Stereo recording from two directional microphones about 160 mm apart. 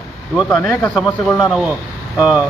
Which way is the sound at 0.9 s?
Centre (ahead or behind).